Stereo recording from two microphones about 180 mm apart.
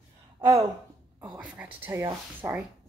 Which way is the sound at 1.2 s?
5° right (ahead or behind).